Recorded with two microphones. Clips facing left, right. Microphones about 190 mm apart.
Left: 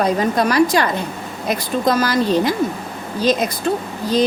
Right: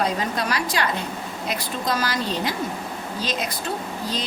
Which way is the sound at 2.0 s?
50° left (ahead or behind).